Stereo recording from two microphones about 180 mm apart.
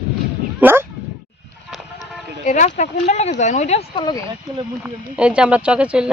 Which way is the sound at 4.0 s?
25° left (ahead or behind).